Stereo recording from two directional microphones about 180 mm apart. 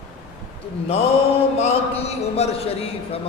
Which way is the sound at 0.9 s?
35° left (ahead or behind).